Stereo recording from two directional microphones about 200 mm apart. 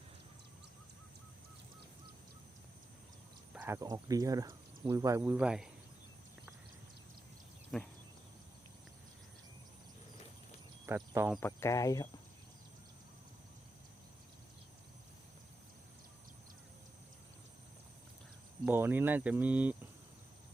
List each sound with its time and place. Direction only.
3.5 s speech: 10° right (ahead or behind)
7.7 s speech: centre (ahead or behind)
10.8 s speech: 10° right (ahead or behind)
11.3 s speech: 15° left (ahead or behind)
18.6 s speech: 10° right (ahead or behind)